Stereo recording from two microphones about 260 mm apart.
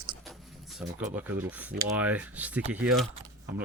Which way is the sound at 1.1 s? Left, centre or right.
Centre.